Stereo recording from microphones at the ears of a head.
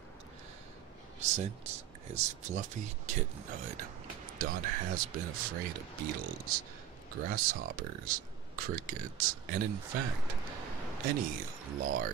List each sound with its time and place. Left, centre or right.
1.2 s speech: right